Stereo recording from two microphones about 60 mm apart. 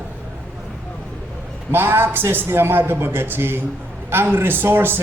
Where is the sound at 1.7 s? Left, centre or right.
Right.